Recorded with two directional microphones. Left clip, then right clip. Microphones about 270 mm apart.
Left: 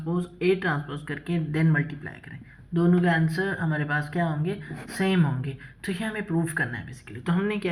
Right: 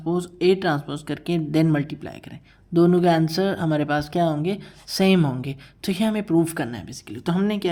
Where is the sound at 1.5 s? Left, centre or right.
Right.